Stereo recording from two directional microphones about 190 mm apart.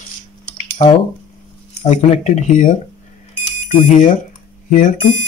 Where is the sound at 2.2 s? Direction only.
40° left (ahead or behind).